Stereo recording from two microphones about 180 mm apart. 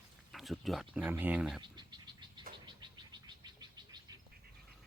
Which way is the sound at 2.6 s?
25° right (ahead or behind).